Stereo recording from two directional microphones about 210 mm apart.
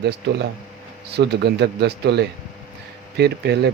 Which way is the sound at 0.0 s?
50° right (ahead or behind).